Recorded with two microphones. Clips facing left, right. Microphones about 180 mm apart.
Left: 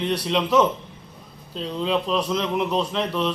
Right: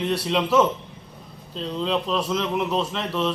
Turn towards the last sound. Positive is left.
turn(degrees=0)  # may be behind; listen again after turning